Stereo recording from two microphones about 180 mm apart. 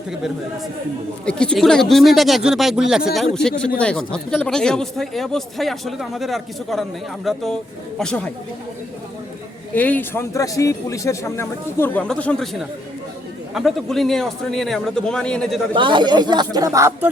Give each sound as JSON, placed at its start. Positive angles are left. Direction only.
{"t": 1.2, "sound": "speech", "side_deg": 5}
{"t": 9.7, "sound": "a man's voice", "side_deg": 10}
{"t": 15.7, "sound": "speech", "side_deg": -25}